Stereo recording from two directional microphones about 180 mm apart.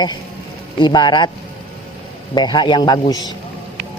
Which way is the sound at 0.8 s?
25° left (ahead or behind).